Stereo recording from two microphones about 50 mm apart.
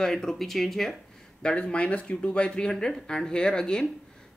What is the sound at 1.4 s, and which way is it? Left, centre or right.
Speech, left.